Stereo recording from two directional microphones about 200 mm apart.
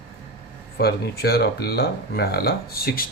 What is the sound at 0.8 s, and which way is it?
Speech, 50° left (ahead or behind).